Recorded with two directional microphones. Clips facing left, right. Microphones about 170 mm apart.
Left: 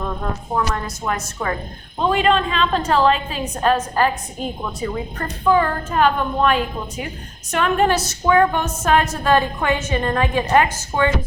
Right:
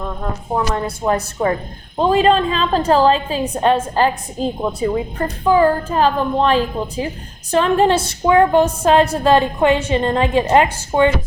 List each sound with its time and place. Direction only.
0.5 s a woman's voice: 25° right (ahead or behind)